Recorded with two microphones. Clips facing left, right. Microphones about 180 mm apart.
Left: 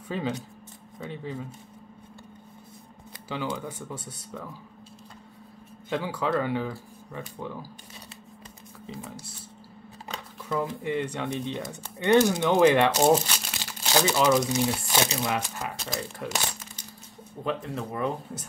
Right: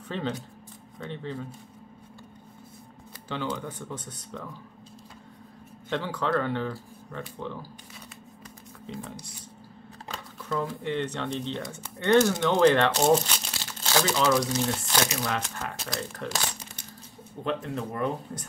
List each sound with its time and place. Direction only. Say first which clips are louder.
0.1 s speech: left 1 dB; 10° left (ahead or behind)
3.3 s speech: even; 10° left (ahead or behind)
5.9 s speech: left 1 dB; 10° left (ahead or behind)
8.8 s speech: right 1 dB; 5° left (ahead or behind)
10.0 s a sound: even; 5° left (ahead or behind)
10.6 s speech: left 1 dB; 10° left (ahead or behind)
13.7 s crumpling: left 1 dB; 15° left (ahead or behind)
14.1 s speech: left 2 dB; 15° left (ahead or behind)
15.4 s speech: left 1 dB; 10° left (ahead or behind)
17.5 s speech: even; centre (ahead or behind)